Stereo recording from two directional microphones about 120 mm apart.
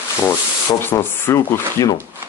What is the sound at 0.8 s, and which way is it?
Speech, 20° left (ahead or behind).